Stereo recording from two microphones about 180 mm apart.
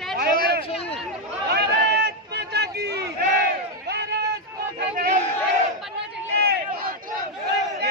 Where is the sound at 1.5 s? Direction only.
65° right (ahead or behind).